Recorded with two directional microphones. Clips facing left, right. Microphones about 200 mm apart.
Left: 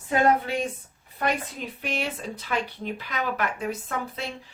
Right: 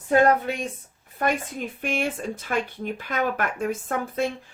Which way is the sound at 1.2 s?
50° right (ahead or behind).